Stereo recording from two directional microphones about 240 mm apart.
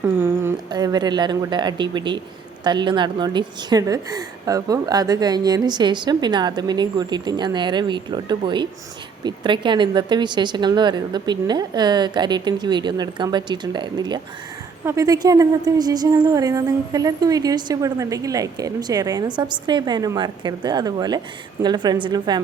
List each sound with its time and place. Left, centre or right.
0.0 s a woman's voice: centre